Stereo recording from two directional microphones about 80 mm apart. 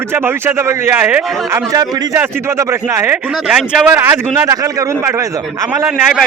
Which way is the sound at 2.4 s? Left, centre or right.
Right.